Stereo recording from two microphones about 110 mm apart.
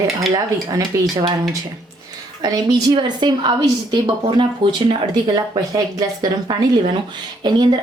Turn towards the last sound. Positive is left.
turn(degrees=-45)  # may be behind; listen again after turning